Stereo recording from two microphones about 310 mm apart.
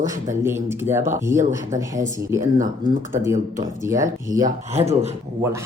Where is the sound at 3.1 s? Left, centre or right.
Centre.